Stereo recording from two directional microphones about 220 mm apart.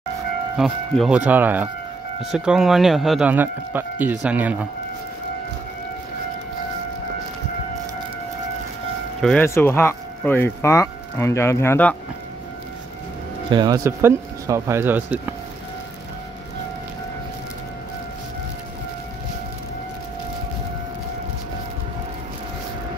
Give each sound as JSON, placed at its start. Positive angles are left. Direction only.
{"t": 0.6, "sound": "speech", "side_deg": 0}
{"t": 9.2, "sound": "speech", "side_deg": 5}
{"t": 13.5, "sound": "speech", "side_deg": -20}